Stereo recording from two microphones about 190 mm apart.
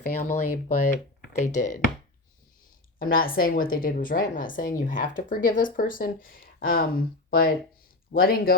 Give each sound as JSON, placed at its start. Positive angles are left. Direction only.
{"t": 0.2, "sound": "a woman's voice", "side_deg": 45}
{"t": 3.0, "sound": "a woman's voice", "side_deg": 50}